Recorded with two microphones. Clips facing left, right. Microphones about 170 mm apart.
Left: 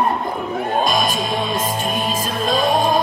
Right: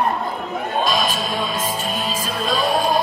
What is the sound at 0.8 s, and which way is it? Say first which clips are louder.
Music: left 2 dB; 50° left (ahead or behind).